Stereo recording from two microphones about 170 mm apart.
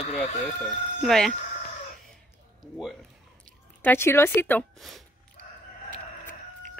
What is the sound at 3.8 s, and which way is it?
A woman's voice, 15° left (ahead or behind).